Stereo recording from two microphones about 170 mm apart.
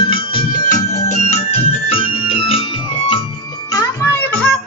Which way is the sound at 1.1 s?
40° left (ahead or behind).